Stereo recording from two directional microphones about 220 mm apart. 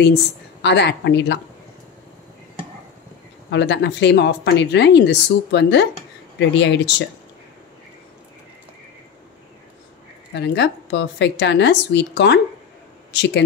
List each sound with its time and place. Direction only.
0.6 s speech: 50° left (ahead or behind)
3.5 s speech: 55° left (ahead or behind)
10.3 s speech: 50° left (ahead or behind)